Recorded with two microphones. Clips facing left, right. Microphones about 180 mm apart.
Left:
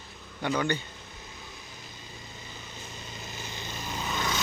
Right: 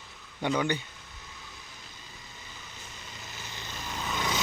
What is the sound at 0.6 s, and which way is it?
Speech, 15° right (ahead or behind).